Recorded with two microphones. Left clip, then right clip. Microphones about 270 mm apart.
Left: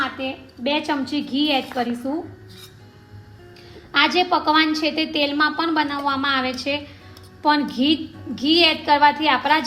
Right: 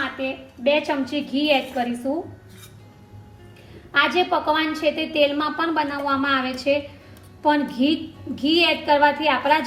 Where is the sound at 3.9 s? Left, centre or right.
Left.